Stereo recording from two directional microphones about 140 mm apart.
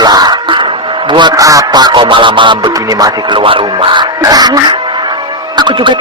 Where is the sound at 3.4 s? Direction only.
40° right (ahead or behind).